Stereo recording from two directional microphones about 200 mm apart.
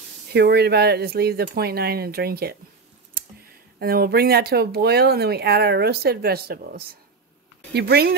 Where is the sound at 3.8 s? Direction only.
50° right (ahead or behind).